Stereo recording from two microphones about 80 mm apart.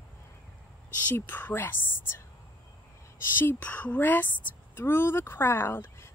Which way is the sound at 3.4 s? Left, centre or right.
Left.